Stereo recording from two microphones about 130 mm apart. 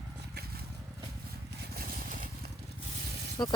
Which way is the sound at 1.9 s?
90° right.